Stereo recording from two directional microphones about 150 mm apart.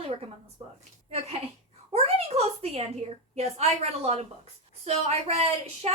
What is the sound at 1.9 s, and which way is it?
A woman's voice, 45° right (ahead or behind).